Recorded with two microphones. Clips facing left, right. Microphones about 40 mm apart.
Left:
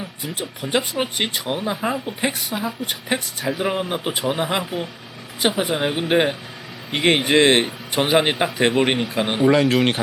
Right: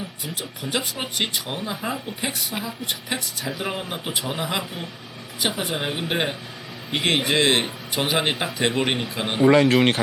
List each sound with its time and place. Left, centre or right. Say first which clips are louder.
0.7 s speech: left 5 dB; centre
2.6 s a woman's voice: left 4 dB; left